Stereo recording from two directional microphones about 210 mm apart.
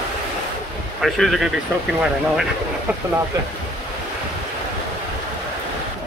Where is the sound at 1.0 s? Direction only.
Centre (ahead or behind).